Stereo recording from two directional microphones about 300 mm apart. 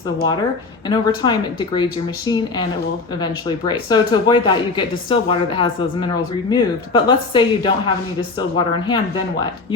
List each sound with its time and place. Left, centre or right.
0.9 s speech: centre
3.7 s speech: centre